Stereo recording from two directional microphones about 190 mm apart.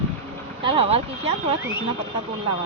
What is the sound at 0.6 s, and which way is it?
Speech, 30° right (ahead or behind).